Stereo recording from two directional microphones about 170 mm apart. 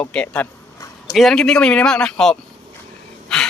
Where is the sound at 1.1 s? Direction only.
Centre (ahead or behind).